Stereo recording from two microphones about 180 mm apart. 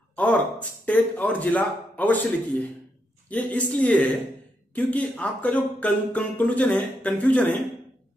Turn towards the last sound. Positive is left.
turn(degrees=10)  # may be behind; listen again after turning